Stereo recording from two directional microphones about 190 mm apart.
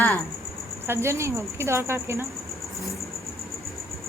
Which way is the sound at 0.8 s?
15° right (ahead or behind).